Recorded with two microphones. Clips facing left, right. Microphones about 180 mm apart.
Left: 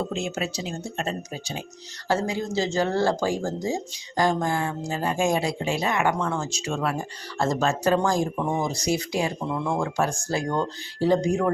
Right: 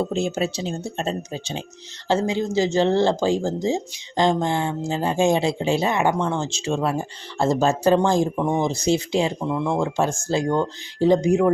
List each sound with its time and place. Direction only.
0.0 s speech: 35° right (ahead or behind); by 11.5 s 20° right (ahead or behind)